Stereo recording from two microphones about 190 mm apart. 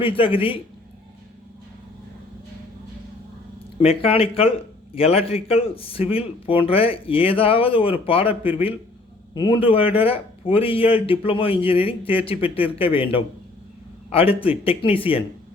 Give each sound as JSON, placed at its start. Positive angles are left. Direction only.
{"t": 0.0, "sound": "speech", "side_deg": 30}
{"t": 3.8, "sound": "speech", "side_deg": 30}